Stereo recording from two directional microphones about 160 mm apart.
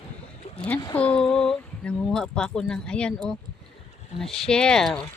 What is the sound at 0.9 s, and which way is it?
Speech, 10° left (ahead or behind).